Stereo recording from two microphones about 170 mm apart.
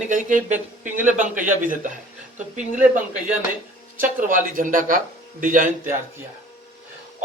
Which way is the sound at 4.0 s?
50° right (ahead or behind).